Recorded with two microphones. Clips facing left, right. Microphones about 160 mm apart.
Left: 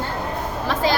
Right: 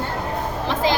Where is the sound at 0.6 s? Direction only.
20° right (ahead or behind).